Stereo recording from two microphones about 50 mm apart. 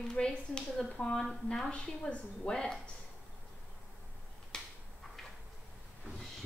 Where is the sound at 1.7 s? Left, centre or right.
Left.